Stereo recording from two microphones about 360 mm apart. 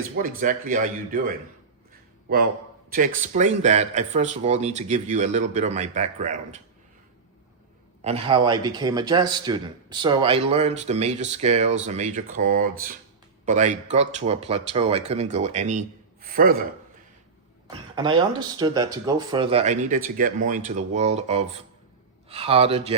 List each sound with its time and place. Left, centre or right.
0.2 s speech: right
2.9 s speech: right
8.0 s a man's voice: centre
18.3 s speech: centre